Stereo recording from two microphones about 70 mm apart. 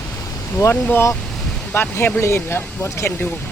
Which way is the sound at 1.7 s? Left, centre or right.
Left.